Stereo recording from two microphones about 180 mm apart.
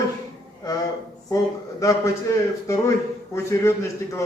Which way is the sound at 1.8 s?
15° left (ahead or behind).